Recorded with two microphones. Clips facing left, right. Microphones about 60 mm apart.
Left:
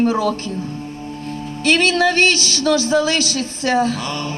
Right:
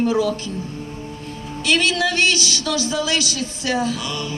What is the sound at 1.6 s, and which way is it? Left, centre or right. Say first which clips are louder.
A man's voice: left 4 dB; left.